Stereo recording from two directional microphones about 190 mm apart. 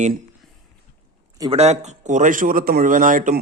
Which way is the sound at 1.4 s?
30° right (ahead or behind).